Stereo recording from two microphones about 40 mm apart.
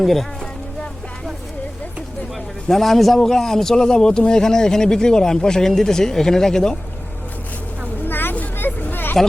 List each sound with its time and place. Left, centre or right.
0.0 s speech: centre
2.6 s speech: centre
8.0 s vehicle: left
8.5 s a sound: left